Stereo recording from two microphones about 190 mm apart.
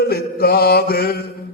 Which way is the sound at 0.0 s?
55° left (ahead or behind).